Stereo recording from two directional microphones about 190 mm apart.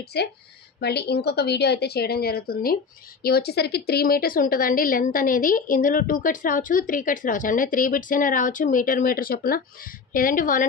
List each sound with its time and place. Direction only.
0.1 s a woman's voice: 60° left (ahead or behind); by 10.7 s 45° left (ahead or behind)